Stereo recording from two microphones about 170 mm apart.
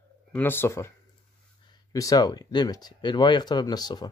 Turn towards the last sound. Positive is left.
turn(degrees=25)  # may be behind; listen again after turning